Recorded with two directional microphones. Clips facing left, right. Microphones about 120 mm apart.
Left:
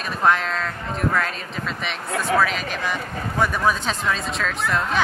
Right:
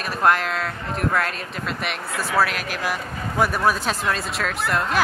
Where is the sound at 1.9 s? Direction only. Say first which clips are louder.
Left 4 dB; 5° right (ahead or behind).